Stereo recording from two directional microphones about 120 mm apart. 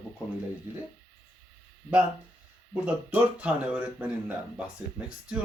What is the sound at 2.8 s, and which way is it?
Speech, 10° right (ahead or behind).